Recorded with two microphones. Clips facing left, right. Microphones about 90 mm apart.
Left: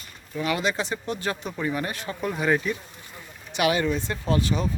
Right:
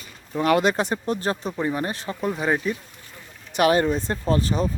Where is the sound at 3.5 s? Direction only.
40° right (ahead or behind).